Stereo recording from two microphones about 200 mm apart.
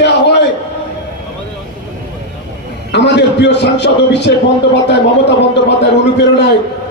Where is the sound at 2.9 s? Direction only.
60° left (ahead or behind).